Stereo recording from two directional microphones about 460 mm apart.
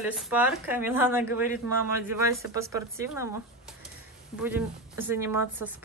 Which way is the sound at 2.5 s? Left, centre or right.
Centre.